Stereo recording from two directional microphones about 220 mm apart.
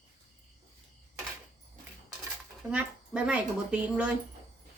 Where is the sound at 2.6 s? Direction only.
5° right (ahead or behind).